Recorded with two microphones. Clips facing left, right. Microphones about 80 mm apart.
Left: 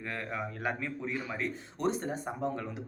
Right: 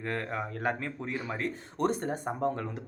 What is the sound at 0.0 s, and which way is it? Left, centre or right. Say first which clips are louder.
Speech: right 3 dB; right.